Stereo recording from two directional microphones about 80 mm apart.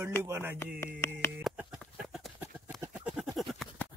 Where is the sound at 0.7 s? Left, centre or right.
Left.